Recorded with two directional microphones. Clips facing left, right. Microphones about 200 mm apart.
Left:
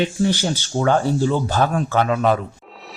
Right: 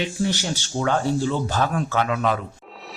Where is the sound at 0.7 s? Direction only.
45° left (ahead or behind).